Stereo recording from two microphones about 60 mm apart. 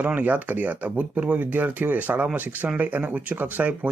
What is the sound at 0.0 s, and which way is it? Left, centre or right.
Speech, right.